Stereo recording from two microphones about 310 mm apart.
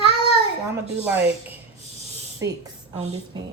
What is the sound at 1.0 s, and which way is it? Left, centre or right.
A woman's voice, centre.